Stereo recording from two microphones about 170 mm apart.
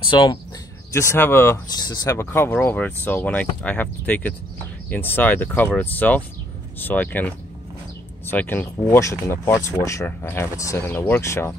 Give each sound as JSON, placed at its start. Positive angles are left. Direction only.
{"t": 0.1, "sound": "speech", "side_deg": 25}
{"t": 0.9, "sound": "speech", "side_deg": 15}